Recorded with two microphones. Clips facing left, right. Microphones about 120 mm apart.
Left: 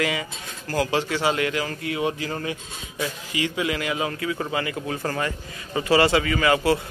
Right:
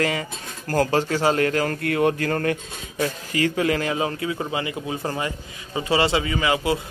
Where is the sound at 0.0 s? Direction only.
45° right (ahead or behind).